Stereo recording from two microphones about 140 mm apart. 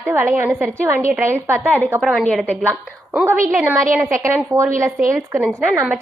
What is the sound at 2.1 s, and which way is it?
Speech, centre (ahead or behind).